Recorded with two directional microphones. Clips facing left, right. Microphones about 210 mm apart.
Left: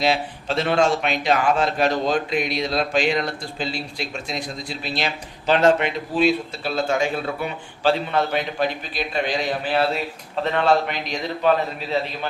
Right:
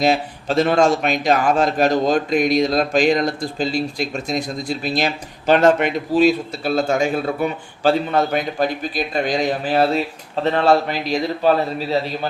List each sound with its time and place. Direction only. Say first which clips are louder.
0.0 s a man's voice: right 4 dB; 45° right (ahead or behind)